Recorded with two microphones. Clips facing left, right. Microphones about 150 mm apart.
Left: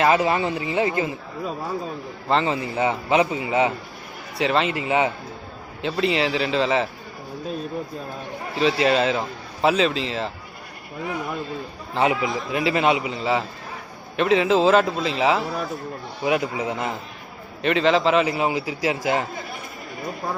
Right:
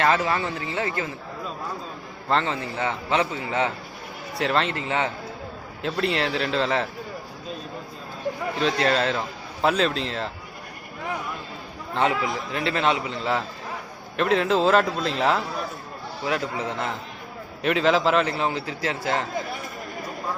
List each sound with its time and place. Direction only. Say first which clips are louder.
0.0 s a man's voice: left 3 dB; 15° left (ahead or behind)
2.3 s a man's voice: left 3 dB; 10° left (ahead or behind)
4.4 s a man's voice: left 3 dB; centre (ahead or behind)
5.8 s a man's voice: left 3 dB; centre (ahead or behind)
8.5 s a man's voice: left 4 dB; 5° left (ahead or behind)
12.5 s a man's voice: left 4 dB; 10° left (ahead or behind)
16.2 s a man's voice: left 4 dB; 10° left (ahead or behind)
17.6 s a man's voice: left 2 dB; centre (ahead or behind)
18.3 s a man's voice: left 3 dB; 10° left (ahead or behind)